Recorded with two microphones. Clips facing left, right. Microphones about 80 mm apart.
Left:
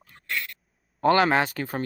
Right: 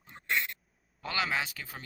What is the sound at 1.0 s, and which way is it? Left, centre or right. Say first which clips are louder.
Speech: left 13 dB; left.